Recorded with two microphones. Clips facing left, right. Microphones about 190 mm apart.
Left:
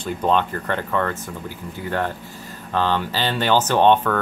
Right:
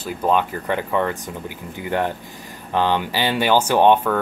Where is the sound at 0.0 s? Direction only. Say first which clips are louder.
Even; 10° right (ahead or behind).